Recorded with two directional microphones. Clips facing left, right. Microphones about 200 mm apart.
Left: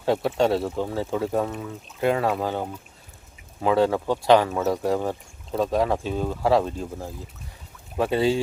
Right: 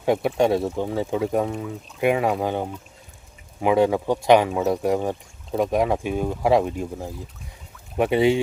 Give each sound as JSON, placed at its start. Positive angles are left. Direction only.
{"t": 0.0, "sound": "speech", "side_deg": -15}